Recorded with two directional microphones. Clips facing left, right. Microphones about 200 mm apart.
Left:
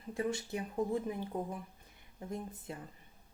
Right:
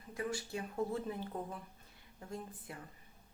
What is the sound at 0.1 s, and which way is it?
Speech, 25° left (ahead or behind).